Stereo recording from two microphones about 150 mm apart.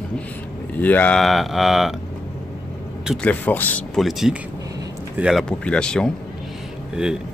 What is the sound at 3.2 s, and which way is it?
Speech, 10° left (ahead or behind).